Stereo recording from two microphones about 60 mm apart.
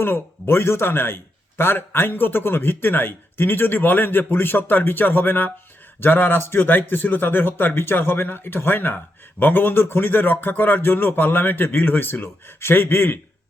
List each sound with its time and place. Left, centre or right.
0.0 s speech: left